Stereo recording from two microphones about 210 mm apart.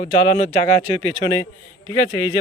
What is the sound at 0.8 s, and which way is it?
Speech, 30° right (ahead or behind).